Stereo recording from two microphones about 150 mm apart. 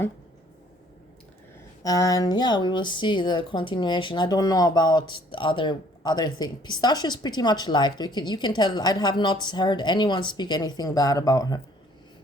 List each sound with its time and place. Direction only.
1.8 s speech: 25° left (ahead or behind)